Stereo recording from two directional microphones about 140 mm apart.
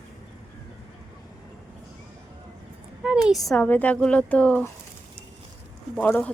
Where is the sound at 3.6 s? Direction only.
10° left (ahead or behind).